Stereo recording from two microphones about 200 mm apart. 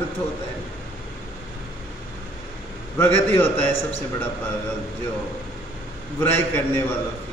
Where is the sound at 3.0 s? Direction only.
10° left (ahead or behind).